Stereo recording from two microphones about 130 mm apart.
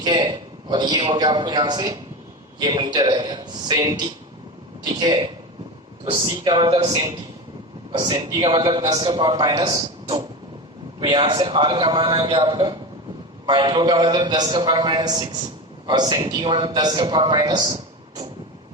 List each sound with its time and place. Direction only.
0.0 s a man's voice: 35° right (ahead or behind)
7.9 s a man's voice: 40° right (ahead or behind)